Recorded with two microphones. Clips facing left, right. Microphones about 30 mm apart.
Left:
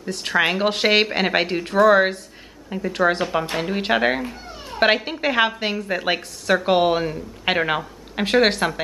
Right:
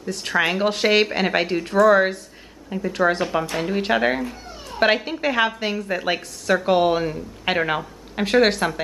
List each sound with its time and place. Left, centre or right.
0.0 s a woman's voice: centre